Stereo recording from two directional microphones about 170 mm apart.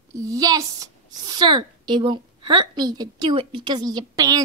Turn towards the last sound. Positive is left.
turn(degrees=-20)  # may be behind; listen again after turning